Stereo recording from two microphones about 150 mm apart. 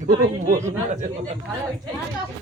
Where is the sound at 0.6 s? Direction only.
50° right (ahead or behind).